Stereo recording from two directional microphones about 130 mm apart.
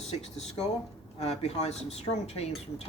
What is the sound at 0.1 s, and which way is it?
A woman's voice, 50° left (ahead or behind).